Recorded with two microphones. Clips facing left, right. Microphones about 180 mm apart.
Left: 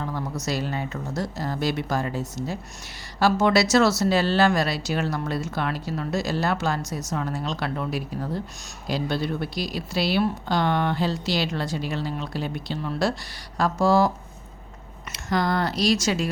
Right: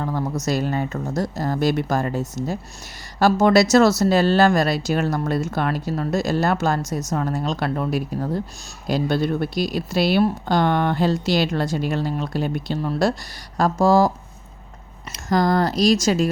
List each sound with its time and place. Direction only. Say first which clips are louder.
0.0 s a sound: right 5 dB; 45° right (ahead or behind)
0.4 s speech: right 5 dB; 45° right (ahead or behind)
15.1 s speech: right 5 dB; 40° right (ahead or behind)